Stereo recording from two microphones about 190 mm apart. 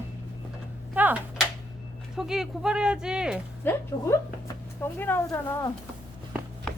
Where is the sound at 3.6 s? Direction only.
10° left (ahead or behind).